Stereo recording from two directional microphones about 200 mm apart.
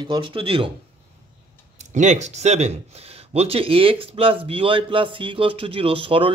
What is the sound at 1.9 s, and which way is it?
Speech, 35° right (ahead or behind).